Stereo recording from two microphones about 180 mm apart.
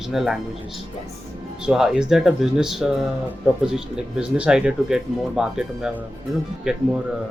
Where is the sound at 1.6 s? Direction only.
5° right (ahead or behind).